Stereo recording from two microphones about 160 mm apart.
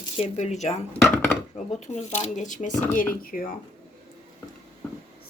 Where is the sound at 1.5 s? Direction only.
45° left (ahead or behind).